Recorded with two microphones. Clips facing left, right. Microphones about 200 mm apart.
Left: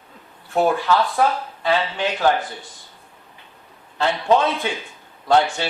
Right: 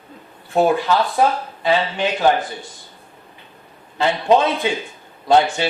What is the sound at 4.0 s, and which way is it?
Speech, 15° right (ahead or behind).